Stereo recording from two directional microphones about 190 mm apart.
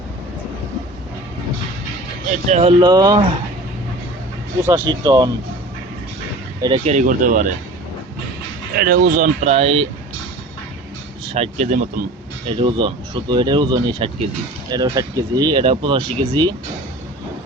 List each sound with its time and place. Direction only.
2.5 s speech: 30° right (ahead or behind)
4.6 s speech: 10° right (ahead or behind)
6.6 s speech: 25° right (ahead or behind); by 7.5 s 45° right (ahead or behind)
8.7 s speech: 50° right (ahead or behind); by 9.8 s 30° right (ahead or behind)
11.3 s speech: 35° right (ahead or behind)
12.5 s speech: 25° right (ahead or behind)